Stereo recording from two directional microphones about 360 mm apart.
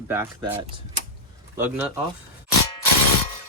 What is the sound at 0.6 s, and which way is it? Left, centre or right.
Speech, centre.